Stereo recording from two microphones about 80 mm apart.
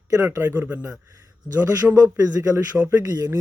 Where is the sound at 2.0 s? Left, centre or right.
Right.